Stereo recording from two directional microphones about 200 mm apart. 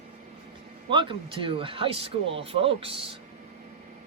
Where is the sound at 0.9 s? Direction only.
25° right (ahead or behind).